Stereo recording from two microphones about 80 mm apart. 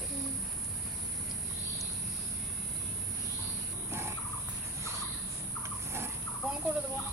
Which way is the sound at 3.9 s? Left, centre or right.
Right.